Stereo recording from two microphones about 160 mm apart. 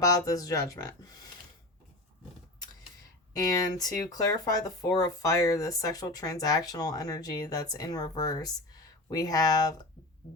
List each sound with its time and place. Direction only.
0.0 s speech: 20° left (ahead or behind)
3.3 s speech: 25° left (ahead or behind)